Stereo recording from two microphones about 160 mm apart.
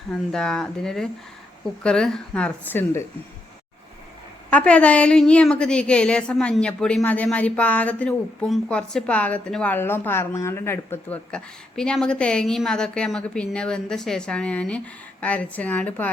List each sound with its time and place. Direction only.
0.1 s a woman's voice: 5° left (ahead or behind)
4.4 s a woman's voice: 10° left (ahead or behind)